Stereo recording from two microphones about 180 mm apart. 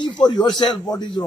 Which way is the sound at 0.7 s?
Centre (ahead or behind).